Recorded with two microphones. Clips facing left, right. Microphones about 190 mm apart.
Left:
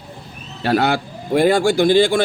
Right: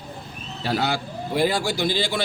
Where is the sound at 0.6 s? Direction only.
60° left (ahead or behind).